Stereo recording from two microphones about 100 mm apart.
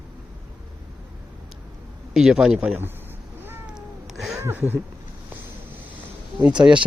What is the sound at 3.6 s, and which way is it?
Cat, 5° right (ahead or behind).